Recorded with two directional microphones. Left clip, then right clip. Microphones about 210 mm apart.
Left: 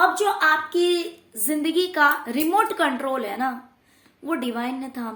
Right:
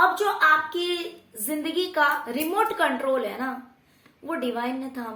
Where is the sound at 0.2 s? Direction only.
50° left (ahead or behind).